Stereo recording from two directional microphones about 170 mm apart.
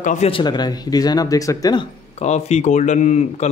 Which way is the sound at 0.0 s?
45° left (ahead or behind).